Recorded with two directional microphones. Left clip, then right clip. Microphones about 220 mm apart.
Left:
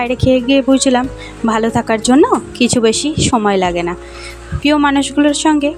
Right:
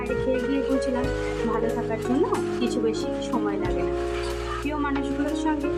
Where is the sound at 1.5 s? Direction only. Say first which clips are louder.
Left 15 dB; 40° left (ahead or behind).